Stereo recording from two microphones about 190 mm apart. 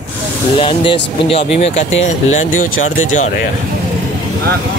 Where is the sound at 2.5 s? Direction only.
90° left.